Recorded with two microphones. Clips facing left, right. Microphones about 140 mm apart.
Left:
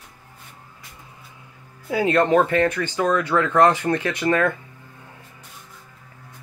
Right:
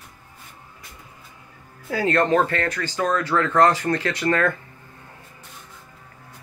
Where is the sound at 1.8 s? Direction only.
15° left (ahead or behind).